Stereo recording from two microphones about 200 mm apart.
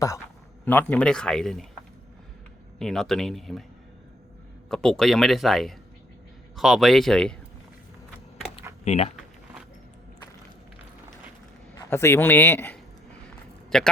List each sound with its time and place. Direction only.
0.6 s speech: 10° left (ahead or behind)
2.7 s speech: centre (ahead or behind)
4.7 s speech: 5° left (ahead or behind)
8.5 s computer keyboard: 30° left (ahead or behind)
11.9 s speech: 10° left (ahead or behind)